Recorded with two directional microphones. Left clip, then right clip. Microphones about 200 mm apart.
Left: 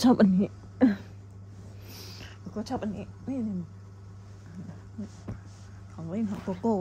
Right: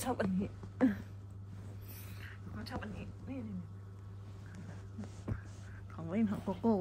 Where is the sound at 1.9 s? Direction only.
35° left (ahead or behind).